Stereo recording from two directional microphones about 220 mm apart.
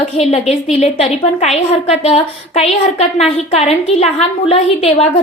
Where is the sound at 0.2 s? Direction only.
25° left (ahead or behind).